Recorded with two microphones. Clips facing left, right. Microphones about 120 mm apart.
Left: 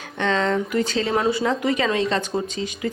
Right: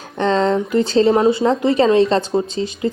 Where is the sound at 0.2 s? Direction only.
35° right (ahead or behind).